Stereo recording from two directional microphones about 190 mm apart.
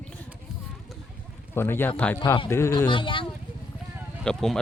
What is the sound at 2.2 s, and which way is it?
Speech, 25° left (ahead or behind).